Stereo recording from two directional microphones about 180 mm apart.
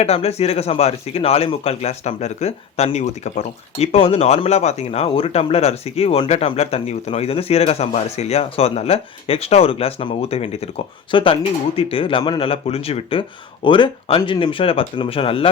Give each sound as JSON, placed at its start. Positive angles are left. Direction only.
{"t": 0.0, "sound": "speech", "side_deg": 35}